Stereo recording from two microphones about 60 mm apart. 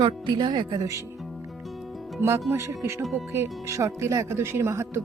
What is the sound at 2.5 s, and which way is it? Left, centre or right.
Speech, right.